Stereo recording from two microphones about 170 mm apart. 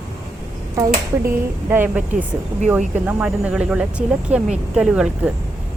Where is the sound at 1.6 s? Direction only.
10° right (ahead or behind).